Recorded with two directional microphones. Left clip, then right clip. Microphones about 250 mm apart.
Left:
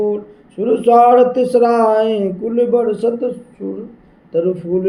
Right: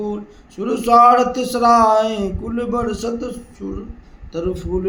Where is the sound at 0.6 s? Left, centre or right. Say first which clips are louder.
Left 2 dB; centre.